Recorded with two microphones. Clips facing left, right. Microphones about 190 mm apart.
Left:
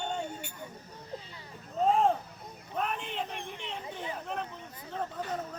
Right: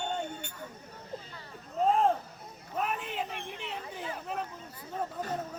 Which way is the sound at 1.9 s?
Centre (ahead or behind).